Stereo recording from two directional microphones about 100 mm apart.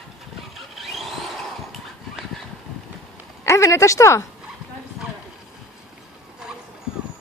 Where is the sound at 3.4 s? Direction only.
30° left (ahead or behind).